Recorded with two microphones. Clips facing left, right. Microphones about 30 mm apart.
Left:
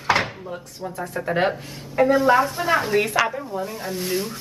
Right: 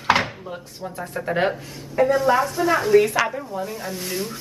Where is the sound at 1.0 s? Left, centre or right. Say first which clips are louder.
Even; centre.